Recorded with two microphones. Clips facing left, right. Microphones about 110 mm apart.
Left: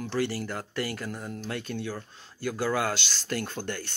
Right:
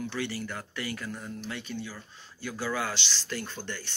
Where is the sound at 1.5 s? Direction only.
55° left (ahead or behind).